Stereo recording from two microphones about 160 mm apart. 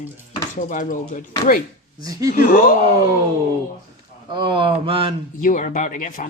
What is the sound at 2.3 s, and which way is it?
Speech, 60° left (ahead or behind).